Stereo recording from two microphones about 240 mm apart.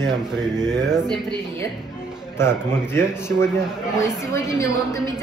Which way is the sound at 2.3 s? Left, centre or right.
Centre.